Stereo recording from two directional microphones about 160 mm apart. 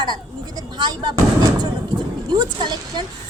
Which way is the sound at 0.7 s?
25° right (ahead or behind).